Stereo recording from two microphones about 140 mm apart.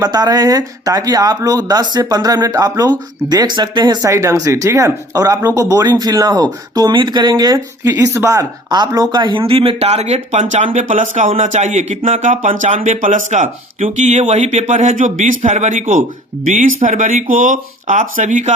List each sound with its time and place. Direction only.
0.0 s speech: 30° right (ahead or behind); by 18.5 s 60° right (ahead or behind)